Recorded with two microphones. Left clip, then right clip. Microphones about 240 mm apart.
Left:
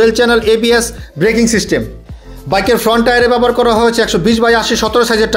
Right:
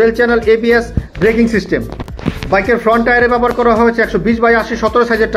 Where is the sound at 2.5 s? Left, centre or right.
Left.